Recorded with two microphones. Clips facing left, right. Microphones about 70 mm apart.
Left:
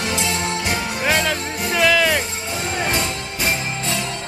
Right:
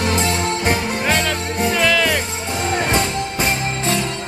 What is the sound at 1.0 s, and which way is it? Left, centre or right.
Music, centre.